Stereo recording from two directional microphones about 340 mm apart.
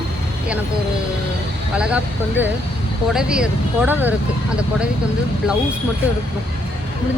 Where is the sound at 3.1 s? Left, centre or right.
Centre.